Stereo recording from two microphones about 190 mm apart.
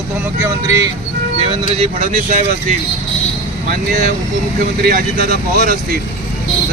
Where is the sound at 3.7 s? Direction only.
40° right (ahead or behind).